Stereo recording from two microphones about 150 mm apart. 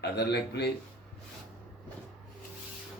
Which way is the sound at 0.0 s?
90° left.